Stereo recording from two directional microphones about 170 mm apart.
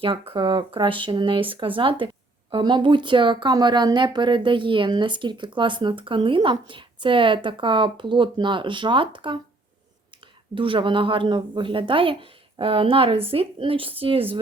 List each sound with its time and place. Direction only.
0.0 s speech: 30° right (ahead or behind)
10.5 s speech: 30° right (ahead or behind)